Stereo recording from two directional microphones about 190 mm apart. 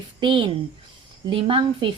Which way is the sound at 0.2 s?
25° right (ahead or behind).